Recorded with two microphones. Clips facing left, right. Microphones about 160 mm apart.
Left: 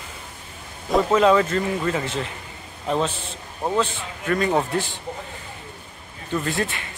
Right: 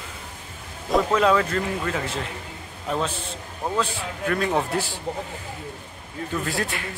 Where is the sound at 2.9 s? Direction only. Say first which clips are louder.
Left 3 dB; 30° left (ahead or behind).